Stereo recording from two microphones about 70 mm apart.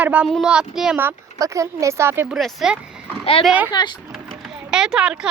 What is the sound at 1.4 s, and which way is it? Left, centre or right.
Speech, right.